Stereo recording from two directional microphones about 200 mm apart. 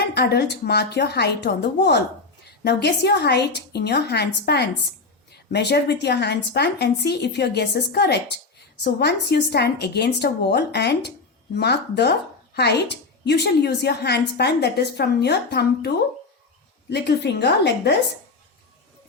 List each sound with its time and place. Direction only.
0.0 s a woman's voice: 55° left (ahead or behind)
16.9 s a woman's voice: 60° left (ahead or behind)